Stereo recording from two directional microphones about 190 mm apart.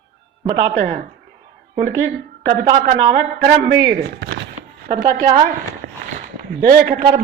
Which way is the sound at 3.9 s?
65° right (ahead or behind).